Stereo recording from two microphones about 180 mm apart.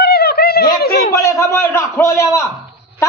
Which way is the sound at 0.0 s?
60° left (ahead or behind).